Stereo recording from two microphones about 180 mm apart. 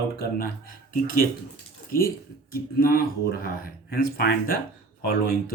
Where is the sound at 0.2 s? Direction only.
60° left (ahead or behind).